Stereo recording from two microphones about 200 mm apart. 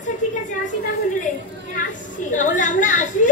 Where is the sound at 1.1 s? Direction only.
40° left (ahead or behind).